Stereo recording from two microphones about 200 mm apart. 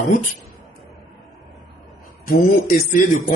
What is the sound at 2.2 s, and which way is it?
Speech, 45° left (ahead or behind).